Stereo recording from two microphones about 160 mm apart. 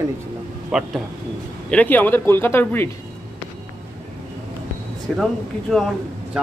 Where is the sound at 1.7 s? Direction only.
10° left (ahead or behind).